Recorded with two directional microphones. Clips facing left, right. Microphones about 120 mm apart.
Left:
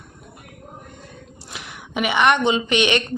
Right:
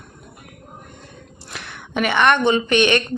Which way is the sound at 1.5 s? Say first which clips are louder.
Right 2 dB; 10° left (ahead or behind).